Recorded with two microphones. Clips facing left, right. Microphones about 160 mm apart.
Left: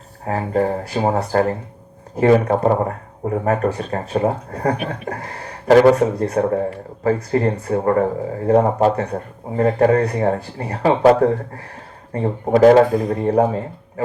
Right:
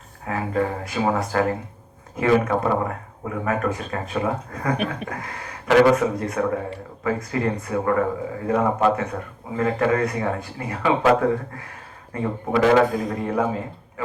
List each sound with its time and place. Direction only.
0.3 s speech: 35° left (ahead or behind)